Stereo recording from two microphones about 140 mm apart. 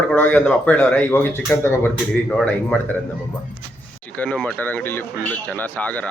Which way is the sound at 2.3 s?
5° left (ahead or behind).